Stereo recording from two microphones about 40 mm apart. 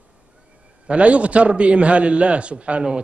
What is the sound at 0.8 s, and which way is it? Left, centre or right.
A man's voice, right.